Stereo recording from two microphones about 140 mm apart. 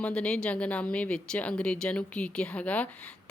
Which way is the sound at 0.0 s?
10° left (ahead or behind).